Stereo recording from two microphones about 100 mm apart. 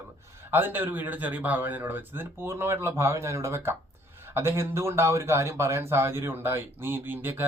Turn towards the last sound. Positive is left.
turn(degrees=-20)  # may be behind; listen again after turning